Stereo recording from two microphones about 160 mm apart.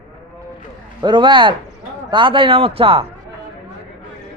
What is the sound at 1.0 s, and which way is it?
A man's voice, 30° right (ahead or behind).